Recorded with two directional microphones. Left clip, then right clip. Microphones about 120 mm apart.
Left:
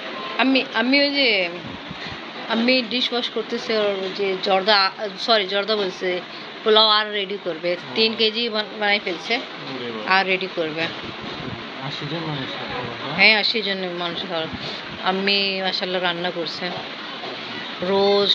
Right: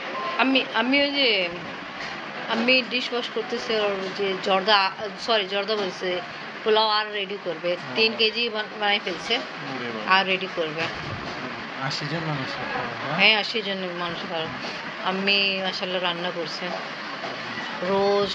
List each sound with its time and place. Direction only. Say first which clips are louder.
0.4 s a woman's voice: left 3 dB; 35° left (ahead or behind)
2.5 s a woman's voice: left 1 dB; 40° left (ahead or behind)
3.0 s speech: left 4 dB; centre (ahead or behind)
4.2 s a woman's voice: left 3 dB; 30° left (ahead or behind)
5.3 s speech: left 4 dB; 45° left (ahead or behind)
13.2 s speech: left 4 dB; 45° left (ahead or behind)
17.9 s speech: left 4 dB; 45° left (ahead or behind)